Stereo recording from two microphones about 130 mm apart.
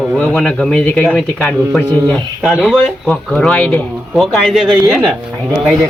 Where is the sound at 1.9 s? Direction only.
30° right (ahead or behind).